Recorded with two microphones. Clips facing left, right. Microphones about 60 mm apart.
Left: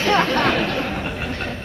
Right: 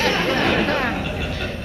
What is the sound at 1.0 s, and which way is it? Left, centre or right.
Vehicle, left.